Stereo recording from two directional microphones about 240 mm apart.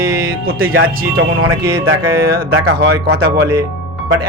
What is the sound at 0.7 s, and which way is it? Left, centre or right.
Speech, right.